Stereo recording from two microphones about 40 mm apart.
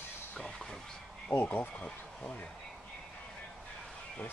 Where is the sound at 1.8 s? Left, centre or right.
Left.